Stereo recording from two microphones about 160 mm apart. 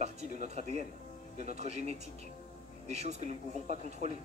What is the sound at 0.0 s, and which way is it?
Speech, 45° right (ahead or behind).